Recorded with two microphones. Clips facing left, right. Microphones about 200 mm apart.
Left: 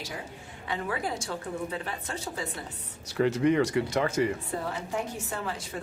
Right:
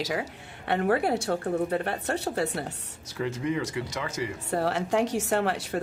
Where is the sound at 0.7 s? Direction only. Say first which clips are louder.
Right 8 dB; 60° right (ahead or behind).